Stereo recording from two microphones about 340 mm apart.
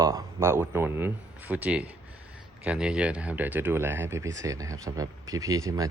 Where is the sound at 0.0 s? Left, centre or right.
Centre.